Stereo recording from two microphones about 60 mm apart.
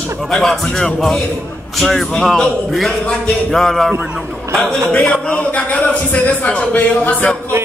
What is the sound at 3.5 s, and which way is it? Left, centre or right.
A man's voice, centre.